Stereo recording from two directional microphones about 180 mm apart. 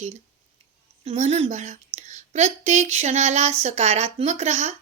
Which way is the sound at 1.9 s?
40° right (ahead or behind).